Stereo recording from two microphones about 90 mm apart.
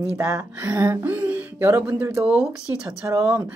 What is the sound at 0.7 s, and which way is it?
Speech, 25° right (ahead or behind).